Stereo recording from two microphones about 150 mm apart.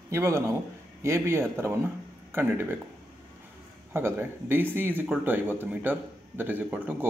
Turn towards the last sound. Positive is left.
turn(degrees=-10)  # may be behind; listen again after turning